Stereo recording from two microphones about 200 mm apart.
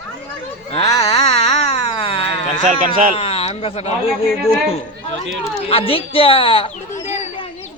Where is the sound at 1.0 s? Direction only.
30° left (ahead or behind).